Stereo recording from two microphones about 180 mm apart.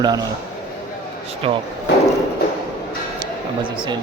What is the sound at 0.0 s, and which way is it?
Speech, 20° right (ahead or behind).